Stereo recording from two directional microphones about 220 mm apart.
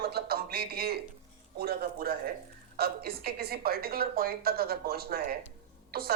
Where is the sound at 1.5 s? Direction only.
45° right (ahead or behind).